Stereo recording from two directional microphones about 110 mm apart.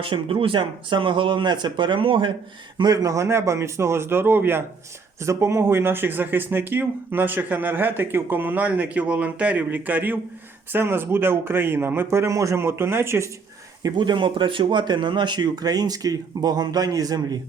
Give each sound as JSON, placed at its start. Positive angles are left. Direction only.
{"t": 0.0, "sound": "speech", "side_deg": -55}
{"t": 2.7, "sound": "speech", "side_deg": -35}
{"t": 13.8, "sound": "speech", "side_deg": -45}